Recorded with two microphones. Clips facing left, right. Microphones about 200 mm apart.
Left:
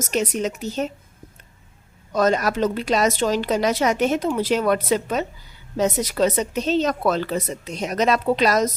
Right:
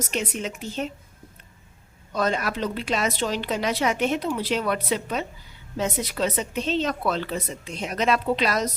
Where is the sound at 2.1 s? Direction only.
45° left (ahead or behind).